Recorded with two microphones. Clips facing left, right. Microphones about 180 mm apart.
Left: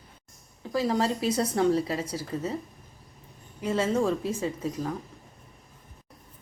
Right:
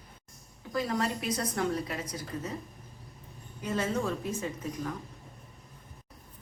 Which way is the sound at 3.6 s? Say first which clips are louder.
Left 5 dB; 25° left (ahead or behind).